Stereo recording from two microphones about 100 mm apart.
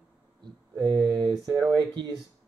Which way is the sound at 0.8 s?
45° right (ahead or behind).